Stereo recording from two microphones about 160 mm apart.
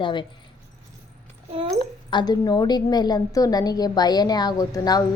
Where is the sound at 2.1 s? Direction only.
25° left (ahead or behind).